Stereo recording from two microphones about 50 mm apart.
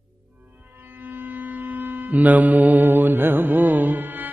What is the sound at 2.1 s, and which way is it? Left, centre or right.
Music, right.